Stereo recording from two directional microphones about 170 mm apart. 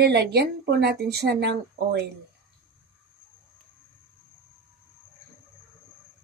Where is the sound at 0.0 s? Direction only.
75° right (ahead or behind).